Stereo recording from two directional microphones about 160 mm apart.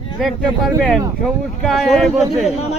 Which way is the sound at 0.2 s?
Centre (ahead or behind).